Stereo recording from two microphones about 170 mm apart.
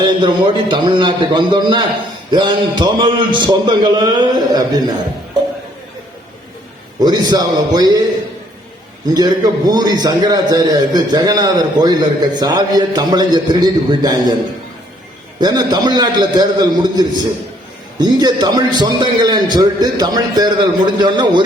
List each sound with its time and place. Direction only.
0.0 s a man's voice: 30° right (ahead or behind)
7.0 s a man's voice: 25° right (ahead or behind)
9.0 s a man's voice: 25° right (ahead or behind)
15.4 s a man's voice: 25° right (ahead or behind)